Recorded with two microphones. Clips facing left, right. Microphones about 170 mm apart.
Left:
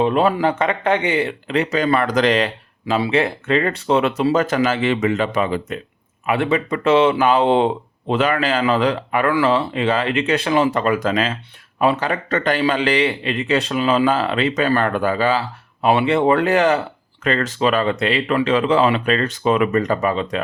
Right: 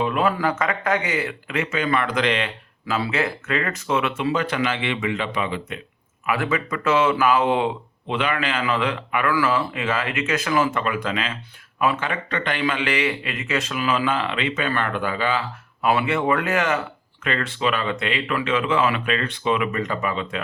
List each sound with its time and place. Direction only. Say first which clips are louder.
0.0 s speech: left 5 dB; 30° left (ahead or behind)
2.9 s speech: left 5 dB; 25° left (ahead or behind)
6.2 s speech: left 5 dB; 30° left (ahead or behind)